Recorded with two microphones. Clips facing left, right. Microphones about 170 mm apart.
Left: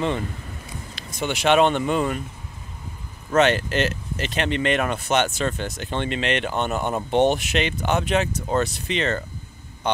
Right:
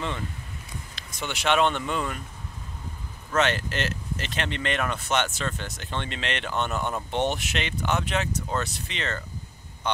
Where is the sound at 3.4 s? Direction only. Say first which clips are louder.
Left 6 dB; 15° left (ahead or behind).